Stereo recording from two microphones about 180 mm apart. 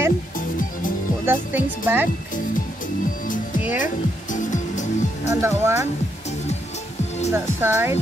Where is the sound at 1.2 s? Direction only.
15° right (ahead or behind).